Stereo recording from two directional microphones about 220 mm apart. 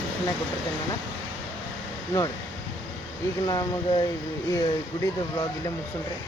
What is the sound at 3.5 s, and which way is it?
Speech, 15° left (ahead or behind).